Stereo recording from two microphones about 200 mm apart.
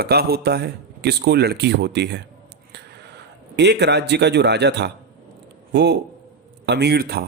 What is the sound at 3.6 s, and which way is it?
A man's voice, 55° right (ahead or behind).